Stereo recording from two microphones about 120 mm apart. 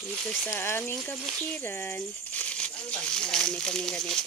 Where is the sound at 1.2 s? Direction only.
5° right (ahead or behind).